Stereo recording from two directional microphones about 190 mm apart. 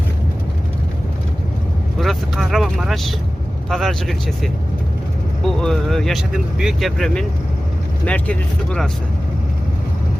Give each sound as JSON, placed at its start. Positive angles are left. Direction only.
{"t": 2.0, "sound": "speech", "side_deg": 0}
{"t": 5.4, "sound": "speech", "side_deg": 0}